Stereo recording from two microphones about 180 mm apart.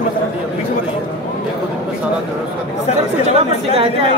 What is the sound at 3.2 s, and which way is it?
Speech, 30° right (ahead or behind).